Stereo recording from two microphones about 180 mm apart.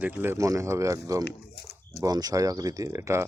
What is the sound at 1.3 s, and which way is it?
Speech, 65° left (ahead or behind).